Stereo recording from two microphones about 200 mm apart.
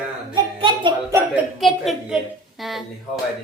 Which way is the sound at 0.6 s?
25° right (ahead or behind).